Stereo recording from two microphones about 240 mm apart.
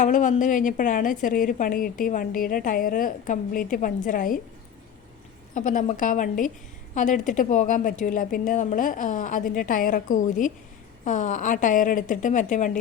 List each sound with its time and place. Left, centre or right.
0.0 s a woman's voice: left
5.5 s a woman's voice: left